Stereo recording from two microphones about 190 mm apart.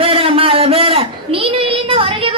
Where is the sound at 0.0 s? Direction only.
30° right (ahead or behind).